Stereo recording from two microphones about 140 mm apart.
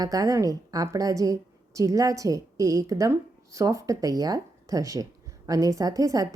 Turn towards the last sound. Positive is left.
turn(degrees=-25)  # may be behind; listen again after turning